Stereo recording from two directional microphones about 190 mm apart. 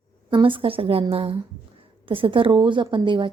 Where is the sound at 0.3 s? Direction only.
25° right (ahead or behind).